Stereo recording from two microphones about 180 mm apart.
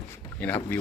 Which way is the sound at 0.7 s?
10° left (ahead or behind).